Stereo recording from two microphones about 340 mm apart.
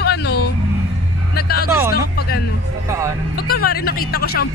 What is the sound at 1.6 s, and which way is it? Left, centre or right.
Speech, centre.